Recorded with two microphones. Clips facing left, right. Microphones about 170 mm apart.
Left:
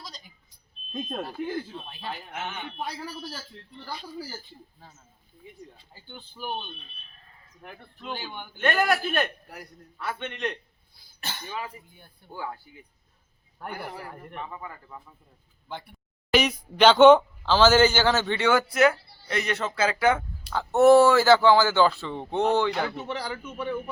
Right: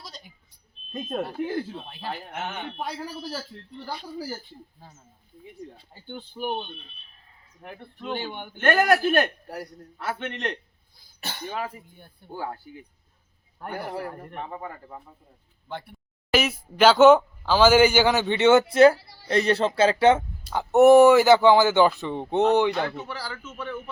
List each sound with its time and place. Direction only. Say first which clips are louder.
0.9 s speech: right 3 dB; 5° right (ahead or behind)
6.4 s speech: right 6 dB; 40° right (ahead or behind)
8.2 s a man's voice: right 2 dB; 55° right (ahead or behind)
10.2 s a man's voice: right 1 dB; 65° right (ahead or behind)
13.7 s speech: right 9 dB; 40° right (ahead or behind)
16.3 s a man's voice: even; 5° right (ahead or behind); by 18.9 s 30° right (ahead or behind)
18.9 s a sound: right 5 dB; 90° right
19.3 s speech: right 7 dB; 30° right (ahead or behind)
23.0 s speech: left 3 dB; 20° left (ahead or behind)